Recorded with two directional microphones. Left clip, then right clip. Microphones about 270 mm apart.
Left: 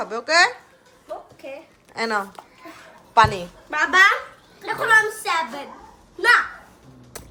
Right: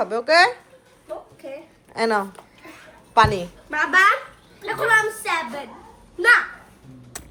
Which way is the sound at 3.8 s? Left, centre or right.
Left.